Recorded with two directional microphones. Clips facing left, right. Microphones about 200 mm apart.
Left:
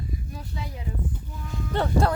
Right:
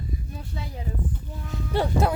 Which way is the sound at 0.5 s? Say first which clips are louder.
Even; 35° right (ahead or behind).